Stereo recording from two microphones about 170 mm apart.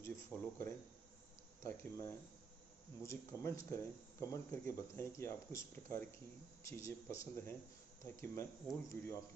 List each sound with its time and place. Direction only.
0.0 s speech: 15° left (ahead or behind)